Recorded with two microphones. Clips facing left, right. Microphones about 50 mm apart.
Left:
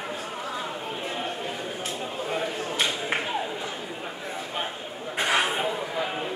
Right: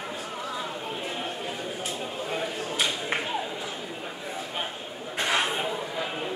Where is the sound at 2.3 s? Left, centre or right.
Centre.